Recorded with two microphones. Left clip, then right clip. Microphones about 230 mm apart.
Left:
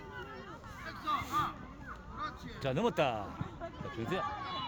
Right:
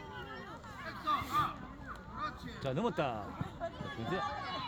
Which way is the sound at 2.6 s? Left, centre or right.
Left.